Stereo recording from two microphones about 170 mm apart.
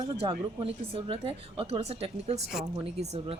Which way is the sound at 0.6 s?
35° right (ahead or behind).